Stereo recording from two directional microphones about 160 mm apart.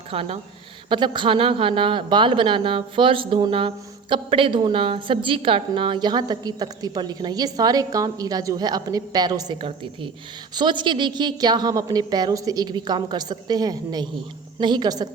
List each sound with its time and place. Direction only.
0.1 s a woman's voice: 35° right (ahead or behind)